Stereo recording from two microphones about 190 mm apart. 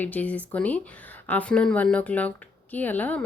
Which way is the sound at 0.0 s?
10° left (ahead or behind).